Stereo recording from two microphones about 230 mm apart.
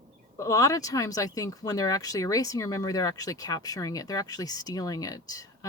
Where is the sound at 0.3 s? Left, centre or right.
Centre.